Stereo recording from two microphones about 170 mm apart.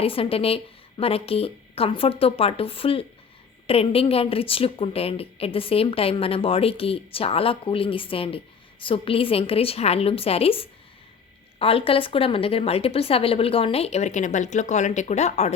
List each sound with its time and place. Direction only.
0.0 s a woman's voice: 35° left (ahead or behind)